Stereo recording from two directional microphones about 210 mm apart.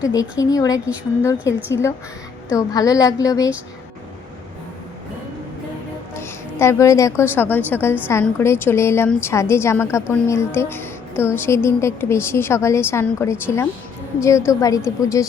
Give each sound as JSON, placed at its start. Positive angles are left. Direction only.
{"t": 0.0, "sound": "a woman's voice", "side_deg": 15}
{"t": 6.1, "sound": "a woman's voice", "side_deg": 10}